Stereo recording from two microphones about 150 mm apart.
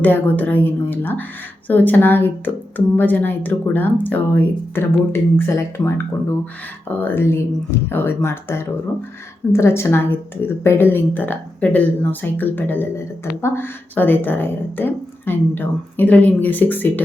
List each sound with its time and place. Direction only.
0.0 s a woman's voice: 10° left (ahead or behind)